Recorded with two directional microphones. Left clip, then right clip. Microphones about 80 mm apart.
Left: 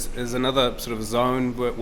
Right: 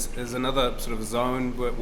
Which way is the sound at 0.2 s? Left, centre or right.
Left.